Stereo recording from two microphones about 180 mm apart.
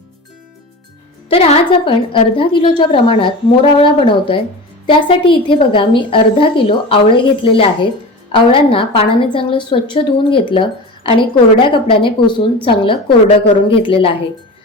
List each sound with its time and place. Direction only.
1.3 s a woman's voice: 35° left (ahead or behind)